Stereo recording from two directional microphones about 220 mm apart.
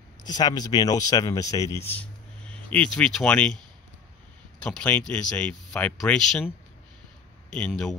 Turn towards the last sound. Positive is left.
turn(degrees=5)  # may be behind; listen again after turning